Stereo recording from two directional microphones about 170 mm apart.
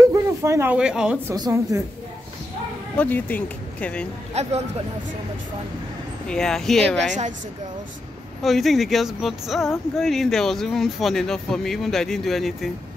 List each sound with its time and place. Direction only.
0.0 s speech: 15° right (ahead or behind)
1.3 s a woman's voice: 20° right (ahead or behind)
3.0 s speech: 10° left (ahead or behind)
4.3 s speech: 40° right (ahead or behind)
6.2 s speech: 5° left (ahead or behind)
8.4 s speech: centre (ahead or behind)